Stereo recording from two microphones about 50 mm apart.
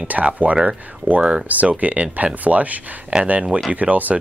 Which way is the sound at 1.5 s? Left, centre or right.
Right.